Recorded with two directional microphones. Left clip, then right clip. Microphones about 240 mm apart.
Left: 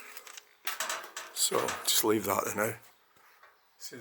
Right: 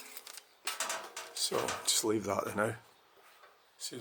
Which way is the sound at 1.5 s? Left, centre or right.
Centre.